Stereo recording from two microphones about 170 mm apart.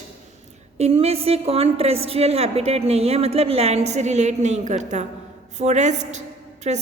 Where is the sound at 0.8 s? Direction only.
35° right (ahead or behind).